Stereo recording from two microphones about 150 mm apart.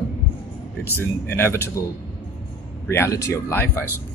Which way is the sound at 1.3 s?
15° left (ahead or behind).